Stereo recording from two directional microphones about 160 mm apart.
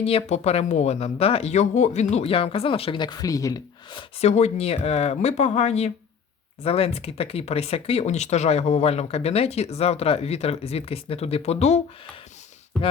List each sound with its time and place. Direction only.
0.0 s speech: 40° left (ahead or behind); by 4.0 s 20° left (ahead or behind)
4.2 s speech: 45° left (ahead or behind)